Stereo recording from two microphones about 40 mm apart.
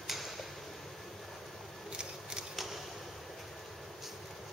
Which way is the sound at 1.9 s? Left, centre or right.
Right.